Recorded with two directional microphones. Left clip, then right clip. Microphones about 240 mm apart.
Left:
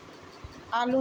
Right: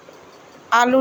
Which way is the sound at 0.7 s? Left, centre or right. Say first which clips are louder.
Right 12 dB; centre.